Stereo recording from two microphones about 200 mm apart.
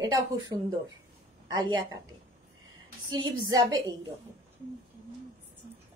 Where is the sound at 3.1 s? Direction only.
20° right (ahead or behind).